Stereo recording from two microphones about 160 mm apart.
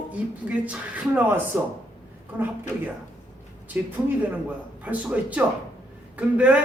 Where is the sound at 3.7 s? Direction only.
10° right (ahead or behind).